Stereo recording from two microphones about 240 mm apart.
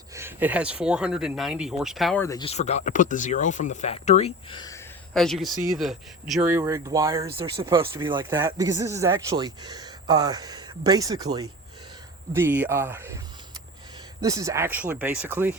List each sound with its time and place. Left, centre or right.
0.1 s speech: centre
2.2 s speech: centre
2.5 s speech: left
5.1 s speech: centre
12.3 s speech: centre
14.2 s speech: centre